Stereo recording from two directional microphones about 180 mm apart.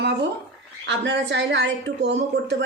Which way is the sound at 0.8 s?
80° right.